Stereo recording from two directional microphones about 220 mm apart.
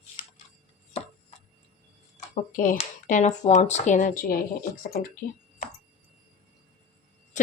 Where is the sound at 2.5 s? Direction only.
40° left (ahead or behind).